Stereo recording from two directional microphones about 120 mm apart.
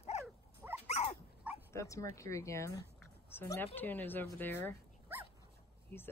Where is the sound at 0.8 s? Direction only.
65° left (ahead or behind).